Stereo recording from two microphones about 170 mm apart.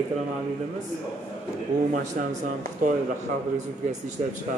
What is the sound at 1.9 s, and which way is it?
Speech, 45° right (ahead or behind).